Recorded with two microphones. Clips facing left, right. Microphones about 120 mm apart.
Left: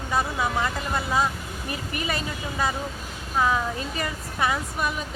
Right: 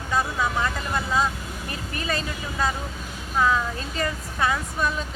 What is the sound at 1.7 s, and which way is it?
Speech, 15° left (ahead or behind).